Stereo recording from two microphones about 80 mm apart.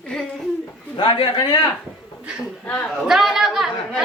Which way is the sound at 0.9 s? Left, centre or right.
Left.